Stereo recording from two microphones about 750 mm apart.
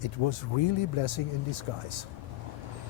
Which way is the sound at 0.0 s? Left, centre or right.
Left.